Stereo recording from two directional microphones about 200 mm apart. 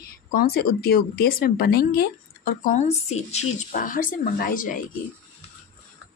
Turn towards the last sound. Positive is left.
turn(degrees=40)  # may be behind; listen again after turning